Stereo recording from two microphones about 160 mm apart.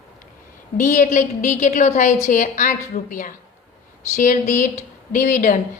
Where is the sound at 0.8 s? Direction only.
50° left (ahead or behind).